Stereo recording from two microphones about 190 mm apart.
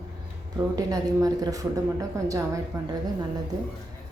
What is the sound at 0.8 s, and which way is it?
Speech, 20° right (ahead or behind).